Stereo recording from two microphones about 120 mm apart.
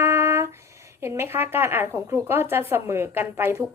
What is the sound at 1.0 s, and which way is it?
A woman's voice, 20° right (ahead or behind).